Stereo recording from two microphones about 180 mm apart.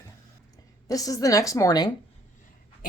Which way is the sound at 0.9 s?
20° left (ahead or behind).